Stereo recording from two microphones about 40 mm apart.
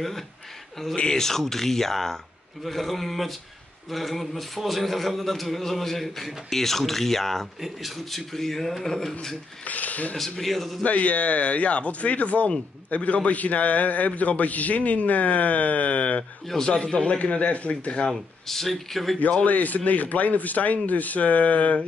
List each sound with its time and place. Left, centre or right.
0.9 s speech: left
1.2 s a man's voice: centre
9.7 s a man's voice: left
10.1 s a man's voice: centre
10.8 s a man's voice: left
16.6 s speech: left
18.1 s a man's voice: centre
19.4 s a man's voice: left